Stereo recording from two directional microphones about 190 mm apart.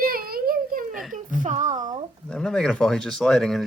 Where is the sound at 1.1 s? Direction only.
45° right (ahead or behind).